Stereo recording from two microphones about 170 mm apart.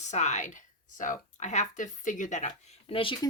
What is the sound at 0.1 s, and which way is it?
Speech, 45° left (ahead or behind).